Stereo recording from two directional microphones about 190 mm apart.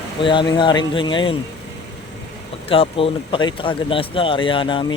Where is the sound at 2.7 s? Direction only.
30° left (ahead or behind).